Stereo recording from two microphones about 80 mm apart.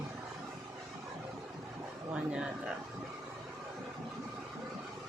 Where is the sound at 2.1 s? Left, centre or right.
Centre.